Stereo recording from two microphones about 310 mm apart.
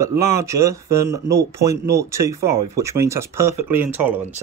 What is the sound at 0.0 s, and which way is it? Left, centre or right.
Speech, centre.